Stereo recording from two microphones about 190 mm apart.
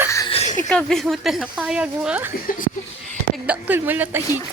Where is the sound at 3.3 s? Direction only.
10° right (ahead or behind).